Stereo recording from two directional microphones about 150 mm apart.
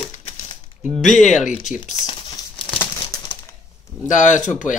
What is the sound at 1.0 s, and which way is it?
Speech, 55° left (ahead or behind).